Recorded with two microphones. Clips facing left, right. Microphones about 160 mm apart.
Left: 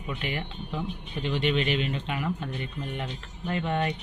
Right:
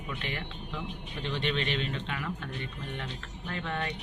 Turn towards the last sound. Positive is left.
turn(degrees=20)  # may be behind; listen again after turning